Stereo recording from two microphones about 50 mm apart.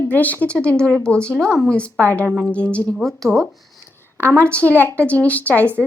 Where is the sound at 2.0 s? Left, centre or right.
Left.